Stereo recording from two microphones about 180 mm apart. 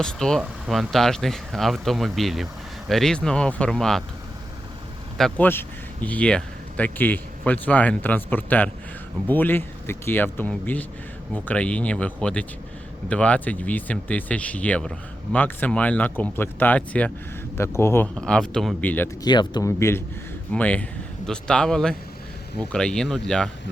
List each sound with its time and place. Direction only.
0.0 s speech: 5° left (ahead or behind)
5.1 s speech: 5° left (ahead or behind)
19.2 s speech: 25° left (ahead or behind); by 23.5 s 5° left (ahead or behind)